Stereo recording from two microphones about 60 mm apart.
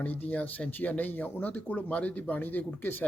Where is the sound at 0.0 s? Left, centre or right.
Left.